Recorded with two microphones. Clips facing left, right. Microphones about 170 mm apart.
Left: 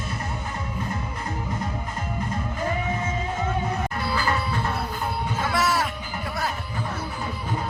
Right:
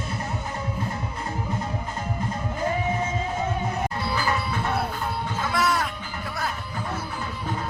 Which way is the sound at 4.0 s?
15° right (ahead or behind).